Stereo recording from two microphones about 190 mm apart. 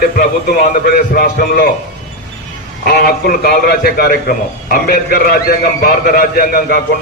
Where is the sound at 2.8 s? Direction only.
55° left (ahead or behind).